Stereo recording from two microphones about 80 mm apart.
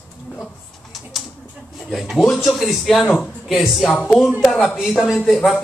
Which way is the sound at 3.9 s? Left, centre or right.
Centre.